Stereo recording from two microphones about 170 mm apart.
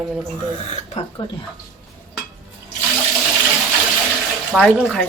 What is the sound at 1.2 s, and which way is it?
Speech, 30° left (ahead or behind).